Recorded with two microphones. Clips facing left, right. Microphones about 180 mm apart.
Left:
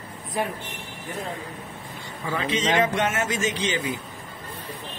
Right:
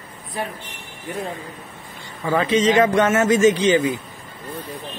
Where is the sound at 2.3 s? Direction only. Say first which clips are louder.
Right 7 dB; 45° right (ahead or behind).